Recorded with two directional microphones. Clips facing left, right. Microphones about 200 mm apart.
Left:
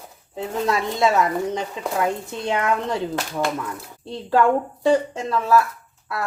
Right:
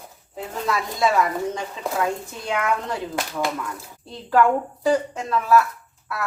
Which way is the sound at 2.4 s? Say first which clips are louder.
Left 2 dB; 25° left (ahead or behind).